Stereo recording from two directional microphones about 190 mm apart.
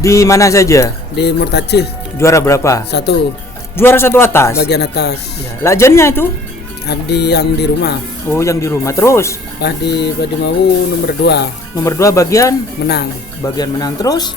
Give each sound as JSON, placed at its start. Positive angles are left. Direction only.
{"t": 0.0, "sound": "speech", "side_deg": 15}
{"t": 1.1, "sound": "speech", "side_deg": 60}
{"t": 2.1, "sound": "speech", "side_deg": 15}
{"t": 4.5, "sound": "speech", "side_deg": 60}
{"t": 5.6, "sound": "speech", "side_deg": 15}
{"t": 6.8, "sound": "speech", "side_deg": 60}
{"t": 8.3, "sound": "speech", "side_deg": 15}
{"t": 9.6, "sound": "speech", "side_deg": 60}
{"t": 11.8, "sound": "speech", "side_deg": 15}
{"t": 12.8, "sound": "speech", "side_deg": 60}
{"t": 13.4, "sound": "speech", "side_deg": 20}